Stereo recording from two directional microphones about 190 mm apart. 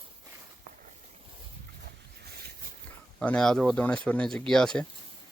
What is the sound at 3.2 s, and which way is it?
Speech, 5° left (ahead or behind).